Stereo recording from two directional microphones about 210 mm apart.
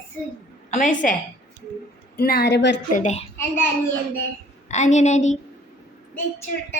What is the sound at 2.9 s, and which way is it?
Speech, 35° left (ahead or behind).